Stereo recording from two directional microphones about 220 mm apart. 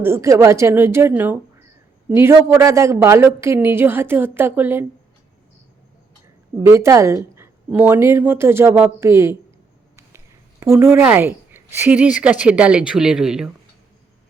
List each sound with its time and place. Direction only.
0.0 s speech: 10° right (ahead or behind)
6.6 s speech: 15° right (ahead or behind)
10.6 s speech: 10° right (ahead or behind)